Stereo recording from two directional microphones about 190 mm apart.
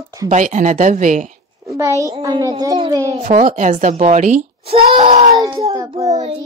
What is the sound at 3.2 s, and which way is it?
A child's voice, 45° right (ahead or behind).